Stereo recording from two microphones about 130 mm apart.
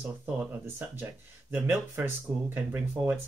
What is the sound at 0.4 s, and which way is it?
Speech, 15° right (ahead or behind).